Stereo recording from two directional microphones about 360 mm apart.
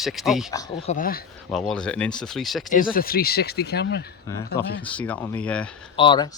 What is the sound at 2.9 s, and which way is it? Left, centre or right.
Speech, left.